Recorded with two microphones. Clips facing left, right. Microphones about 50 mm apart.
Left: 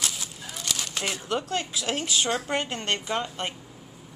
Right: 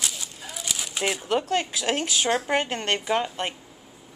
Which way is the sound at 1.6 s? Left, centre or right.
Right.